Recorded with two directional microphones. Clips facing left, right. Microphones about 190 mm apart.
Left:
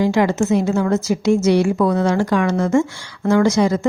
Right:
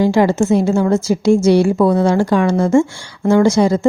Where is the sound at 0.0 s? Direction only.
30° right (ahead or behind).